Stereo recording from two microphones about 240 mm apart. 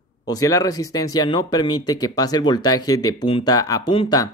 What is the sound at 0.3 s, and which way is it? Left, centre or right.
Speech, centre.